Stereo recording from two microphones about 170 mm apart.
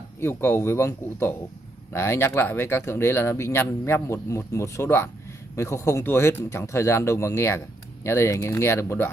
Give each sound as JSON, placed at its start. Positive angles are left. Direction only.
{"t": 0.2, "sound": "speech", "side_deg": 15}